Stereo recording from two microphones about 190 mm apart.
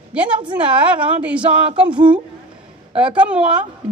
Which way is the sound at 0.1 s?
5° right (ahead or behind).